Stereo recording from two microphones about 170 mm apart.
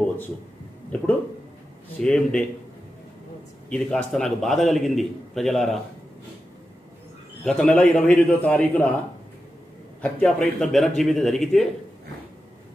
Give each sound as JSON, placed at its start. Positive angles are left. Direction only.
{"t": 2.0, "sound": "a man's voice", "side_deg": 5}
{"t": 3.7, "sound": "a man's voice", "side_deg": 5}
{"t": 7.4, "sound": "a man's voice", "side_deg": 5}
{"t": 10.0, "sound": "a man's voice", "side_deg": 5}